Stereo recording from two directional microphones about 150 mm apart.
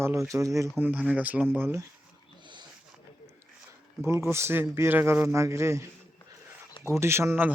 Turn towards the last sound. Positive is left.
turn(degrees=-15)  # may be behind; listen again after turning